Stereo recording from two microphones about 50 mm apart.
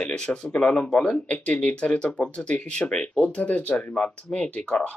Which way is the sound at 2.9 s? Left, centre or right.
Centre.